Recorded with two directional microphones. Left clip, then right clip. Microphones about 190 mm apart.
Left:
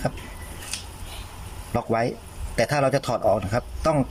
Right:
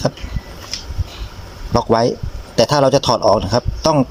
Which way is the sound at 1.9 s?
15° right (ahead or behind).